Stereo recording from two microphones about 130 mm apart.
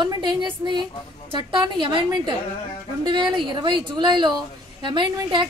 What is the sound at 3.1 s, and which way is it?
A woman's voice, 35° right (ahead or behind).